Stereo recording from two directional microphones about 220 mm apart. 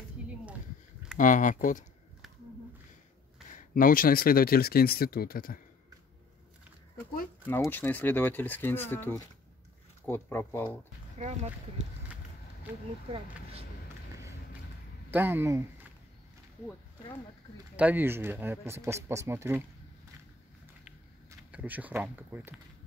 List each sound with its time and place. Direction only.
0.2 s a sound: 5° right (ahead or behind)
1.1 s speech: 35° left (ahead or behind)
3.4 s speech: 40° left (ahead or behind)
7.4 s speech: 10° left (ahead or behind)
11.2 s speech: 35° right (ahead or behind)
15.0 s speech: 10° right (ahead or behind)
17.7 s speech: 10° right (ahead or behind)
21.3 s speech: 5° right (ahead or behind)